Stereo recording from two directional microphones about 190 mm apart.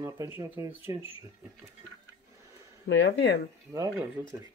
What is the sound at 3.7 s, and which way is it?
Speech, 15° right (ahead or behind).